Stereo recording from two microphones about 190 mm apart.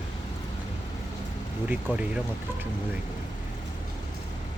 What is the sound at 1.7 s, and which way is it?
Speech, 10° right (ahead or behind).